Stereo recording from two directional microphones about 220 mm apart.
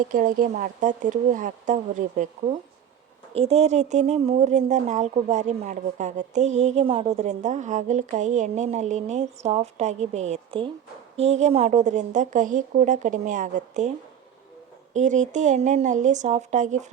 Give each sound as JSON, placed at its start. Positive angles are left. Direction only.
{"t": 0.1, "sound": "speech", "side_deg": -40}
{"t": 3.3, "sound": "speech", "side_deg": -30}
{"t": 14.9, "sound": "speech", "side_deg": -35}